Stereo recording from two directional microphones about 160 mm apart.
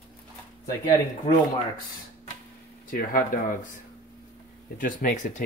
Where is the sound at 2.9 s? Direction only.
60° left (ahead or behind).